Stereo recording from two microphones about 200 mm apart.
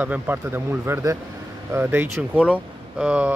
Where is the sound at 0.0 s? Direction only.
10° right (ahead or behind).